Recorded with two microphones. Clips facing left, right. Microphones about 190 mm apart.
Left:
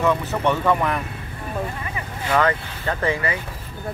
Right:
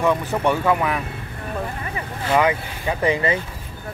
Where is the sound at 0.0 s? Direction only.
15° right (ahead or behind).